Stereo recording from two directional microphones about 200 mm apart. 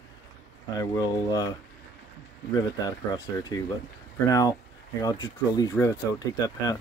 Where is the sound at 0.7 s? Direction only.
15° left (ahead or behind).